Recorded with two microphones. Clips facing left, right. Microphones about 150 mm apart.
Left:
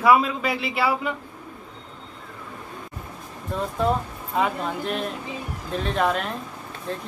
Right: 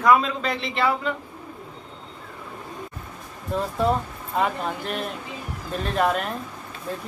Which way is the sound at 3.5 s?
Centre (ahead or behind).